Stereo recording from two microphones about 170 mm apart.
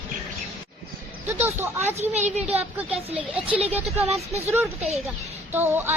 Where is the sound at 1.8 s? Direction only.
40° right (ahead or behind).